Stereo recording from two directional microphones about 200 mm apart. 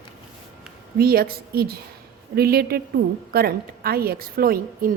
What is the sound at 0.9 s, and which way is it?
A woman's voice, 50° right (ahead or behind).